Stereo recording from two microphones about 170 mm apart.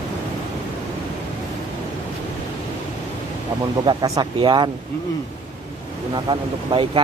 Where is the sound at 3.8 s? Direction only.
25° right (ahead or behind).